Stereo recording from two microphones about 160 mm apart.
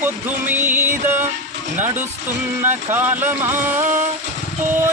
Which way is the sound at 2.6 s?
10° right (ahead or behind).